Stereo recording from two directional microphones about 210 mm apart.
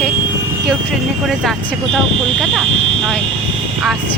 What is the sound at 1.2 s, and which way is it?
Speech, centre (ahead or behind).